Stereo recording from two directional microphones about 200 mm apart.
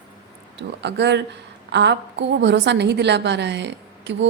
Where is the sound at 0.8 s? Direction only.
60° right (ahead or behind).